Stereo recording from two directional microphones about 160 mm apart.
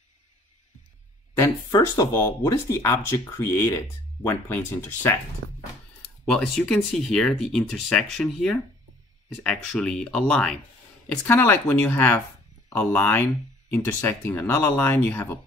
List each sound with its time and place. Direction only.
1.4 s speech: 20° left (ahead or behind)
6.2 s speech: 5° left (ahead or behind)